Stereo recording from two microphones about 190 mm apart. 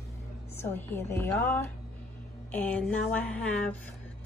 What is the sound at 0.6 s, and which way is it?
A woman's voice, 10° left (ahead or behind).